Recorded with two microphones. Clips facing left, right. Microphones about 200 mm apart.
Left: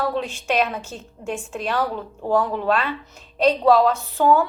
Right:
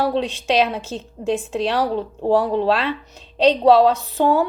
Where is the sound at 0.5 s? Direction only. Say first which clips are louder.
Right 3 dB; 30° right (ahead or behind).